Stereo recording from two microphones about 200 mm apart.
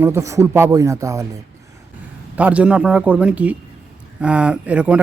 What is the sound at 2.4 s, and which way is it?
Speech, 5° right (ahead or behind).